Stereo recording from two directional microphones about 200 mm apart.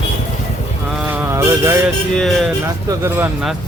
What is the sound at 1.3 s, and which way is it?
Speech, 15° right (ahead or behind).